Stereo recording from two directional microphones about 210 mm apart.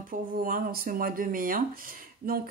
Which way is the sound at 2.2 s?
45° right (ahead or behind).